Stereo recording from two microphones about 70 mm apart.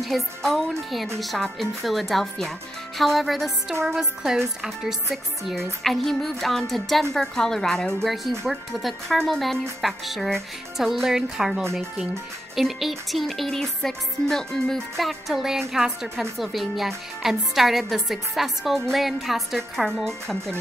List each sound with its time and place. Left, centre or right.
0.0 s speech: centre